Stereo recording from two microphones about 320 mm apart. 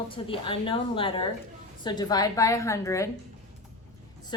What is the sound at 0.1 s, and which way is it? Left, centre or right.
A woman's voice, centre.